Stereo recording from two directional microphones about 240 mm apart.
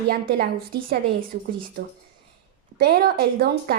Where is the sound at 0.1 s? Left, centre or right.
Right.